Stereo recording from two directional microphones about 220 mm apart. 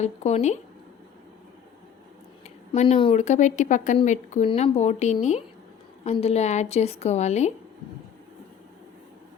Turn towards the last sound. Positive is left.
turn(degrees=30)  # may be behind; listen again after turning